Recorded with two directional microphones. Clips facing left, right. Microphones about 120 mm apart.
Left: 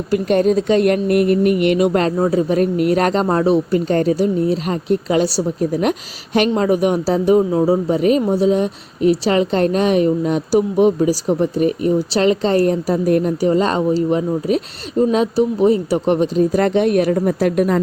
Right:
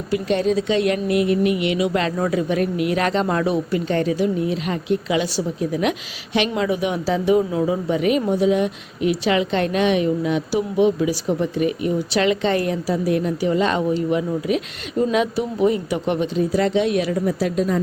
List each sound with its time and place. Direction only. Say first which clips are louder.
0.1 s speech: left 5 dB; 50° left (ahead or behind)
2.1 s speech: left 5 dB; 30° left (ahead or behind); by 17.7 s 60° left (ahead or behind)